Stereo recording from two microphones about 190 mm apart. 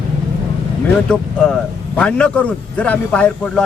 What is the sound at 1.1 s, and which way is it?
A man's voice, 5° left (ahead or behind).